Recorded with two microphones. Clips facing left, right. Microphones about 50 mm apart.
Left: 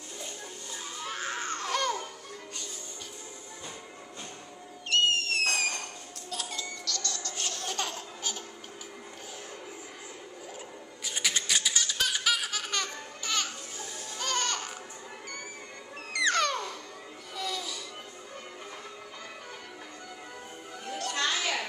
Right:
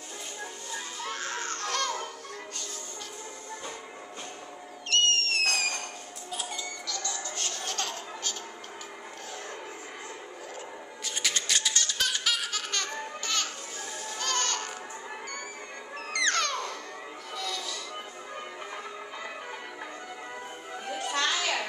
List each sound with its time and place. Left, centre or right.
1.0 s music: centre
4.8 s owl: centre
6.3 s music: centre
7.6 s laughter: centre
11.2 s baby laughter: centre
13.2 s music: centre
16.1 s music: centre
21.1 s music: right